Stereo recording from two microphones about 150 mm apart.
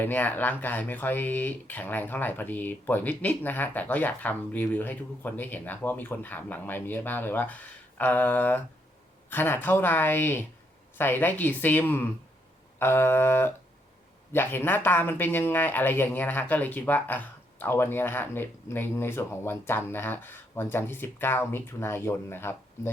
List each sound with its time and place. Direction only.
0.0 s speech: 10° left (ahead or behind)